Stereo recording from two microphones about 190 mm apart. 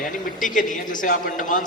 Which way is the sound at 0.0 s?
45° left (ahead or behind).